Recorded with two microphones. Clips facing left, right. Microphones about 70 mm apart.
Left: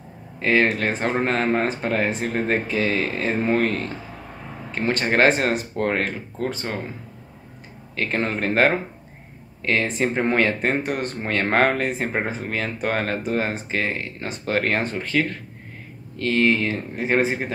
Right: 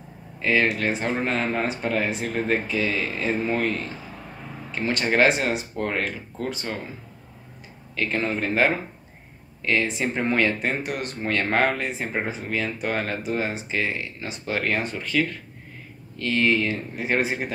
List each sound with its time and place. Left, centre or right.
0.4 s speech: left
7.9 s speech: left
15.0 s speech: left
16.2 s speech: left